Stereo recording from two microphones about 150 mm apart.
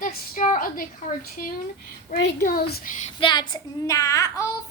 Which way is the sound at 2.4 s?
75° left (ahead or behind).